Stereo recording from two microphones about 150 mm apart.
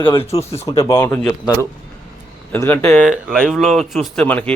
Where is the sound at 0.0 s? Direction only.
35° left (ahead or behind).